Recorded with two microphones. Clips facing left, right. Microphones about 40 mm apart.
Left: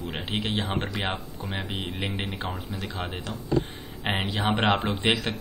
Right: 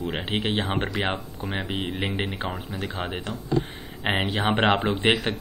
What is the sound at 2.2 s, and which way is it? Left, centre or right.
Speech, centre.